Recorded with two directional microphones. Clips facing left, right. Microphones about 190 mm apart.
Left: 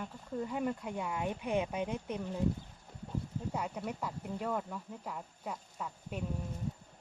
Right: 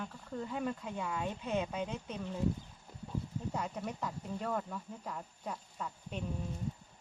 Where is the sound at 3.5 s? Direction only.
10° left (ahead or behind).